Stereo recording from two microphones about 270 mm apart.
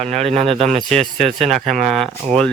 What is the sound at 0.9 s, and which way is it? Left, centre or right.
Speech, centre.